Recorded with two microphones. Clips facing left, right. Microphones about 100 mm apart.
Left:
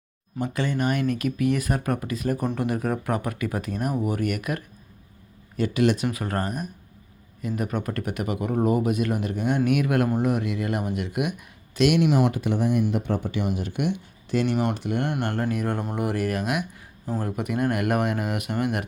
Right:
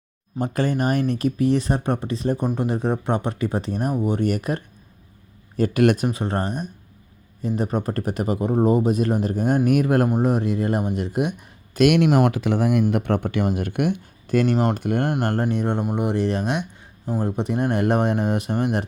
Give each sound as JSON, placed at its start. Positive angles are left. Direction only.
{"t": 0.3, "sound": "speech", "side_deg": -45}
{"t": 5.5, "sound": "speech", "side_deg": -45}
{"t": 6.1, "sound": "speech", "side_deg": -25}
{"t": 11.8, "sound": "speech", "side_deg": -60}
{"t": 12.9, "sound": "speech", "side_deg": -65}
{"t": 13.4, "sound": "speech", "side_deg": -50}
{"t": 15.2, "sound": "speech", "side_deg": -30}
{"t": 17.1, "sound": "speech", "side_deg": -15}
{"t": 17.3, "sound": "speech", "side_deg": -30}